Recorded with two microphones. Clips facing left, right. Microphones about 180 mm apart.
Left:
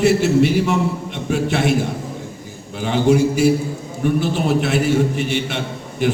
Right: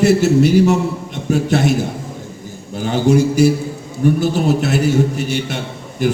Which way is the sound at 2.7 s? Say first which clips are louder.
Right 1 dB; 40° right (ahead or behind).